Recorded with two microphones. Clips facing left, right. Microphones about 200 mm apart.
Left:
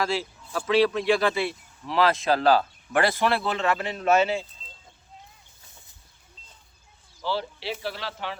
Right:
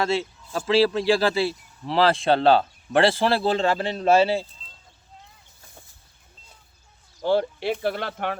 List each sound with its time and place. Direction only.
0.0 s speech: 25° right (ahead or behind)
7.2 s speech: 50° right (ahead or behind)